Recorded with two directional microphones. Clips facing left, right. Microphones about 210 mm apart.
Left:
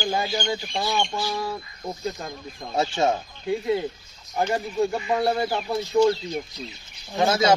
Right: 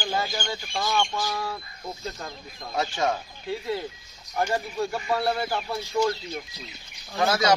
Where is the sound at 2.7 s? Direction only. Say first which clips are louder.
Left 4 dB; 25° left (ahead or behind).